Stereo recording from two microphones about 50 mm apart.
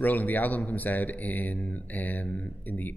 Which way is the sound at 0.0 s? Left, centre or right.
Left.